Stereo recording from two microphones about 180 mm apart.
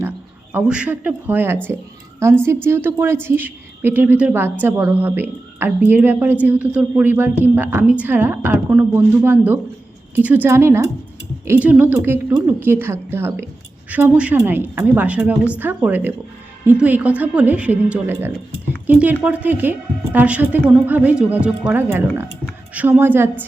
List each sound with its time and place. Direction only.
0.5 s a woman's voice: 10° right (ahead or behind)